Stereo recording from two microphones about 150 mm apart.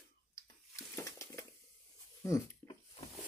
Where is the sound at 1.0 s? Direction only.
20° left (ahead or behind).